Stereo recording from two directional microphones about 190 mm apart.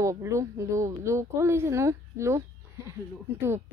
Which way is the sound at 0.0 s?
15° right (ahead or behind).